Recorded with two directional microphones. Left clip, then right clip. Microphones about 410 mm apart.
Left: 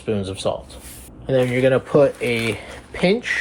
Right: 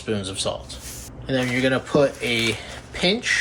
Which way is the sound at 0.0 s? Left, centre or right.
Centre.